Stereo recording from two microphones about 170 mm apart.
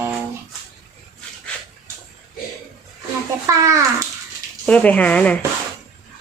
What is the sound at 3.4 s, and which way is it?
Speech, 20° right (ahead or behind).